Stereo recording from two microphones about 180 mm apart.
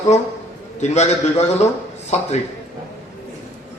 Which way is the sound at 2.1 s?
40° left (ahead or behind).